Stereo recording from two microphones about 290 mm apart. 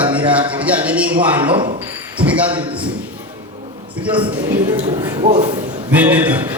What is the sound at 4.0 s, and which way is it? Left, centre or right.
A man's voice, centre.